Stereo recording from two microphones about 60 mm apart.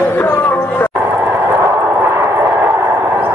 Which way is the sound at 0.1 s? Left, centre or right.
Left.